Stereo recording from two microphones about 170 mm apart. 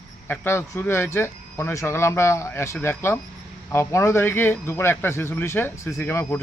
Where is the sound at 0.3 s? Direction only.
15° left (ahead or behind).